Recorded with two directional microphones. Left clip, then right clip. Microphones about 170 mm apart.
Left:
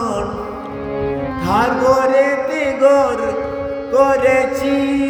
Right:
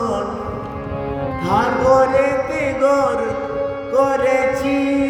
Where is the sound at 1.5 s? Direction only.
30° left (ahead or behind).